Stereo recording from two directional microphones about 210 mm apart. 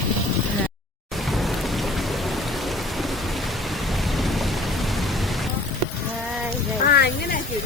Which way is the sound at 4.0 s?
Centre (ahead or behind).